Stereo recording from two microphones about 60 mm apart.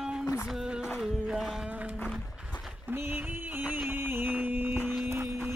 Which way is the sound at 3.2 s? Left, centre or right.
Right.